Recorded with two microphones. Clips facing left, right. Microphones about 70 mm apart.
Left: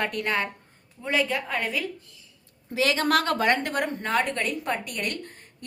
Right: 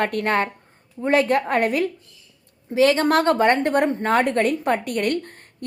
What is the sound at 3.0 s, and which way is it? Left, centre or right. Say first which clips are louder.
A woman's voice: right 6 dB; right.